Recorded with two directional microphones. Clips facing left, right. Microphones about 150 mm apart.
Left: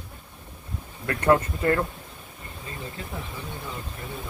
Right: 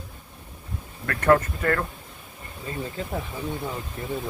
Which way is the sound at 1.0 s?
20° left (ahead or behind).